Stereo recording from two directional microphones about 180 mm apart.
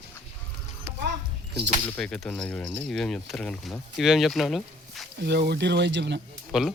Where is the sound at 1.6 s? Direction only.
5° left (ahead or behind).